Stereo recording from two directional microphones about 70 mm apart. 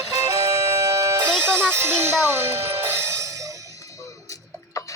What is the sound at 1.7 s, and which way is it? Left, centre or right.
Speech, right.